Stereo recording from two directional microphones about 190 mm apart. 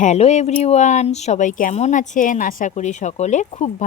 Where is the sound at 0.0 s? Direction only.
35° left (ahead or behind).